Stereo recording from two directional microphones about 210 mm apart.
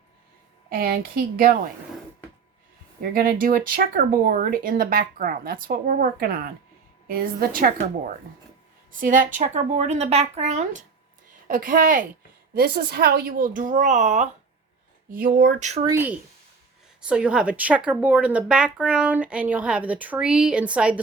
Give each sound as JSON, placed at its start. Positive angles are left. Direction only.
{"t": 0.7, "sound": "speech", "side_deg": -45}
{"t": 3.0, "sound": "a woman's voice", "side_deg": -45}
{"t": 15.8, "sound": "speech", "side_deg": -10}